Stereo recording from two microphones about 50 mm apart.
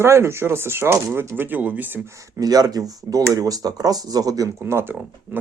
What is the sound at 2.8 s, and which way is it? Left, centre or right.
Speech, right.